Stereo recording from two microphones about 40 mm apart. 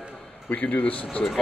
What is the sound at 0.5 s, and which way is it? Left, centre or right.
Speech, left.